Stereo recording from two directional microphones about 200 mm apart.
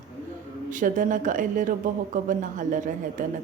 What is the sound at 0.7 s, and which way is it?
Speech, 40° right (ahead or behind).